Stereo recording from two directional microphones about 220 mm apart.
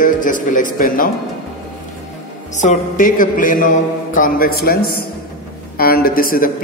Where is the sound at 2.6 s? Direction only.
35° left (ahead or behind).